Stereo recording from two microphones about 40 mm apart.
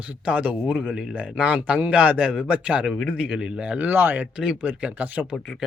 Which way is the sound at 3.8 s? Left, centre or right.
Right.